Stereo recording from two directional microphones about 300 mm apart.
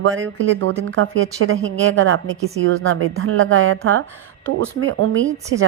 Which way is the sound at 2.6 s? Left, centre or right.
Right.